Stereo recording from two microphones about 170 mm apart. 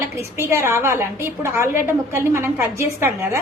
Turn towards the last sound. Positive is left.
turn(degrees=-15)  # may be behind; listen again after turning